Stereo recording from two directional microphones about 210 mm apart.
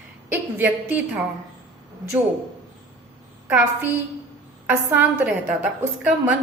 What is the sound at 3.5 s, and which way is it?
A woman's voice, 10° right (ahead or behind).